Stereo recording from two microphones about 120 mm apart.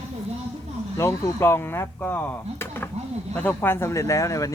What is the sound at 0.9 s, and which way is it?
Speech, 20° left (ahead or behind).